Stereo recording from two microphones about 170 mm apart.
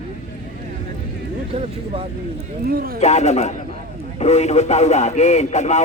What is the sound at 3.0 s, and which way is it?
Speech, 40° left (ahead or behind).